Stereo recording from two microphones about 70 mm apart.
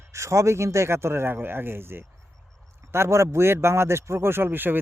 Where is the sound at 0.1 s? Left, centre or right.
Right.